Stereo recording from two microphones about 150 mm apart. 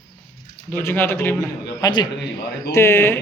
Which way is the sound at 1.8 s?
30° left (ahead or behind).